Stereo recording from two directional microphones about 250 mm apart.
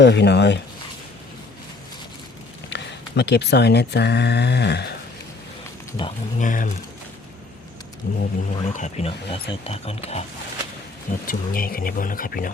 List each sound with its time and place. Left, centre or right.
0.0 s speech: left
2.6 s speech: left
6.0 s speech: left
8.1 s speech: left
11.3 s speech: left